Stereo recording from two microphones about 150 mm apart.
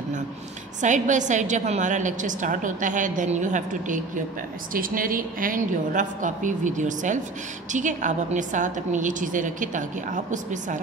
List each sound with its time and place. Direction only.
0.7 s a woman's voice: 55° right (ahead or behind)
4.7 s a woman's voice: 70° right (ahead or behind)